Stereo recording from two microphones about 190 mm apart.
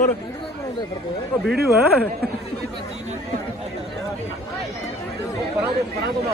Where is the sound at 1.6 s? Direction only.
10° left (ahead or behind).